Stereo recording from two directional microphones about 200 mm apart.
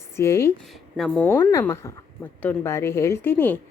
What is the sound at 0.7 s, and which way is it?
A woman's voice, centre (ahead or behind).